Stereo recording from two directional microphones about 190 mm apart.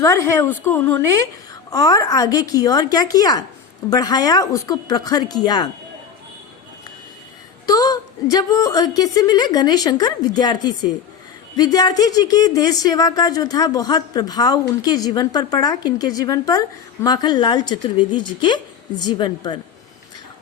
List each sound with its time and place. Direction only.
0.0 s a woman's voice: 15° left (ahead or behind)
7.7 s a woman's voice: 20° left (ahead or behind)